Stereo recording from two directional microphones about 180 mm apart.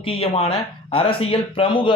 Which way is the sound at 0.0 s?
30° left (ahead or behind).